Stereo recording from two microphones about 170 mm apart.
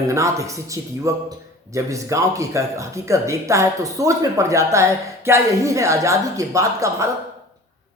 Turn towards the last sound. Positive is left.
turn(degrees=-20)  # may be behind; listen again after turning